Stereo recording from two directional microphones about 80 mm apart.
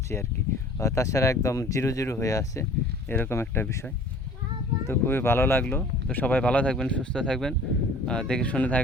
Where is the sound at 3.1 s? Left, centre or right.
Left.